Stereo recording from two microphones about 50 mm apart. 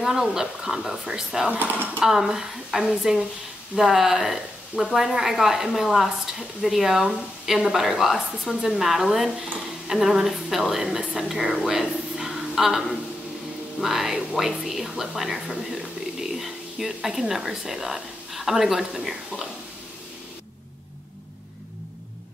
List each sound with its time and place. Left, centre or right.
0.0 s speech: centre
1.6 s speech: right
2.0 s a woman's voice: centre